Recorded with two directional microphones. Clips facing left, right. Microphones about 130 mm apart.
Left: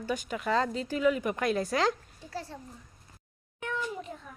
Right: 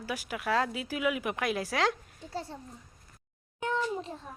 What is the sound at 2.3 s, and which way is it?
Speech, 25° right (ahead or behind).